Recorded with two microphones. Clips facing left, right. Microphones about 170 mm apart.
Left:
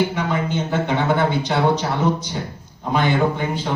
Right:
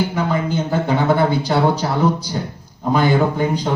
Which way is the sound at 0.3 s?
35° right (ahead or behind).